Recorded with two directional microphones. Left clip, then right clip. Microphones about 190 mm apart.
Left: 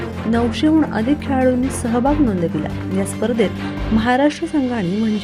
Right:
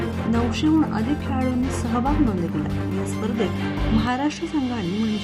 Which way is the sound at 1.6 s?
Centre (ahead or behind).